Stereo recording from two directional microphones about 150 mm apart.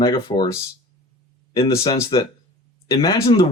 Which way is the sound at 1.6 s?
20° left (ahead or behind).